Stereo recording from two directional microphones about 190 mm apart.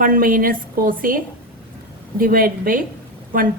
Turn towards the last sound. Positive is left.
turn(degrees=-45)  # may be behind; listen again after turning